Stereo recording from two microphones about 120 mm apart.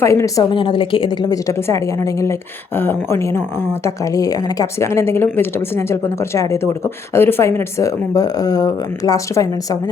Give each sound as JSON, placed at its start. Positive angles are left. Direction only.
{"t": 0.0, "sound": "a woman's voice", "side_deg": 25}
{"t": 0.5, "sound": "a woman's voice", "side_deg": 45}
{"t": 1.5, "sound": "a woman's voice", "side_deg": 25}